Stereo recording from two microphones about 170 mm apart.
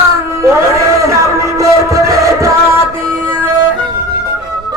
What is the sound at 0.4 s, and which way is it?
Music, 15° right (ahead or behind).